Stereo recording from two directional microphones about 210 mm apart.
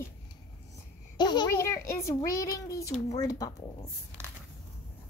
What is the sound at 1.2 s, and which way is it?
A child's voice, 20° left (ahead or behind).